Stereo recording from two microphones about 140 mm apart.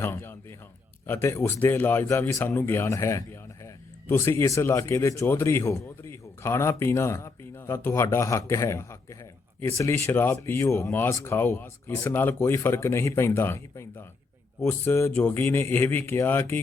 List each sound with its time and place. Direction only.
0.0 s speech: 15° left (ahead or behind)